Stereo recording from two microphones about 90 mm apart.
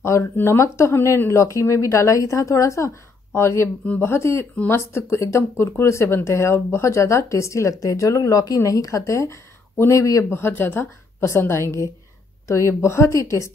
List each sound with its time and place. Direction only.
0.0 s speech: 30° left (ahead or behind)
3.8 s speech: 15° left (ahead or behind)
4.1 s speech: 30° left (ahead or behind)